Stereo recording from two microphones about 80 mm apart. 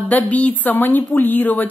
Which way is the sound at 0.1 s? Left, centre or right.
Centre.